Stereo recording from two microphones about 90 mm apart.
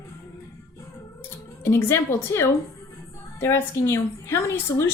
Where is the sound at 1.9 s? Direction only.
25° left (ahead or behind).